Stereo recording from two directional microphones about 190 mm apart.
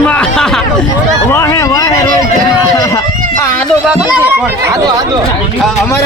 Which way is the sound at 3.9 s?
10° right (ahead or behind).